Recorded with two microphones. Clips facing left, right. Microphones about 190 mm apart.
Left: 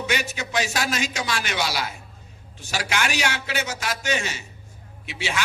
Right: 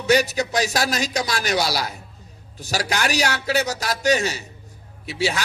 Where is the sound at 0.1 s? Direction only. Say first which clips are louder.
Right 11 dB; 40° right (ahead or behind).